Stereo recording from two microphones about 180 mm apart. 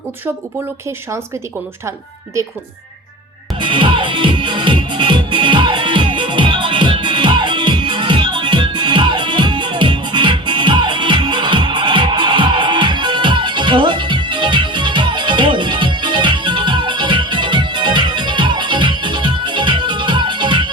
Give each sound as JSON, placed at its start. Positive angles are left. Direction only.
{"t": 3.6, "sound": "music", "side_deg": -25}